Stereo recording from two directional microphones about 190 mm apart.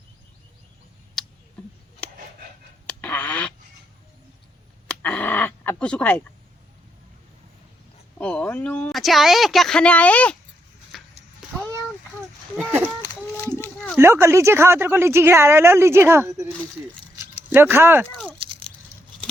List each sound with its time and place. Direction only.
1.2 s a sound: centre (ahead or behind)
2.8 s a sound: 10° left (ahead or behind)
4.9 s dog: 10° left (ahead or behind)
8.2 s speech: 5° left (ahead or behind)
10.9 s a sound: centre (ahead or behind)
12.5 s speech: 10° right (ahead or behind)
13.3 s run: 10° left (ahead or behind)
14.0 s a woman's voice: 15° right (ahead or behind)
17.5 s a woman's voice: 10° right (ahead or behind)
18.0 s speech: 5° left (ahead or behind)